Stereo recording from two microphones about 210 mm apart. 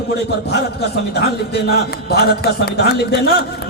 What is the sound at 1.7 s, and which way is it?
A man's voice, 50° left (ahead or behind).